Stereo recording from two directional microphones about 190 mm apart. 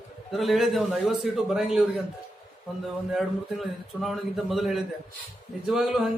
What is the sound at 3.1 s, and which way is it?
A man's voice, centre (ahead or behind).